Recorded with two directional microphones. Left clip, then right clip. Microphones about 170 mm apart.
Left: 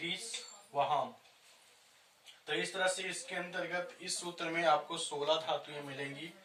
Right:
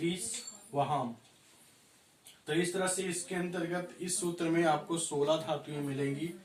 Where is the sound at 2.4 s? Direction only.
Centre (ahead or behind).